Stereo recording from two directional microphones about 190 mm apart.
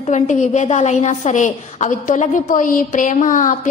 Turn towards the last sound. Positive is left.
turn(degrees=45)  # may be behind; listen again after turning